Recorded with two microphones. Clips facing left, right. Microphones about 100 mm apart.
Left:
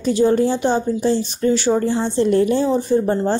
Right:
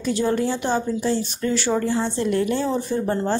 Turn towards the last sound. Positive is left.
turn(degrees=20)  # may be behind; listen again after turning